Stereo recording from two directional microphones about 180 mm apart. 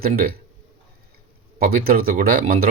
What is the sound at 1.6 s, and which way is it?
Speech, 55° right (ahead or behind).